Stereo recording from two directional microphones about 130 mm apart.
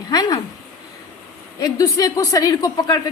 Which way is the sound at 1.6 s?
25° left (ahead or behind).